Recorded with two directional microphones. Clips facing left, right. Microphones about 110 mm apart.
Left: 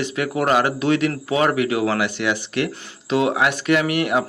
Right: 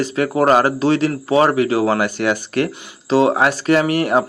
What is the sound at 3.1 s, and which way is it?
Speech, 35° right (ahead or behind).